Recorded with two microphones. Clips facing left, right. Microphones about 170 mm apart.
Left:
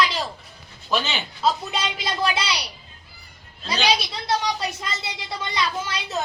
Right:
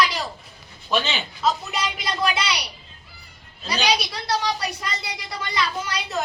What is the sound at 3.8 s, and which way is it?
A woman's voice, 25° left (ahead or behind).